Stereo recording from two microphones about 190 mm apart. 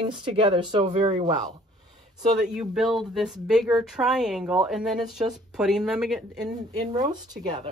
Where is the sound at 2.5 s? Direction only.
Centre (ahead or behind).